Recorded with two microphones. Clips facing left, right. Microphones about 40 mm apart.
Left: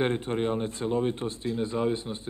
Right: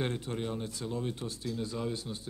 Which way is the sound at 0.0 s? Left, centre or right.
Left.